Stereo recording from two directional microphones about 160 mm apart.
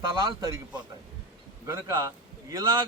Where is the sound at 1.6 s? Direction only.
15° right (ahead or behind).